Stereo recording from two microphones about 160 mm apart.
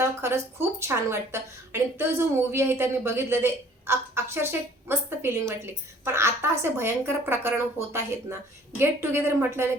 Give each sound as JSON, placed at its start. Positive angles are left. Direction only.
{"t": 0.0, "sound": "speech", "side_deg": -15}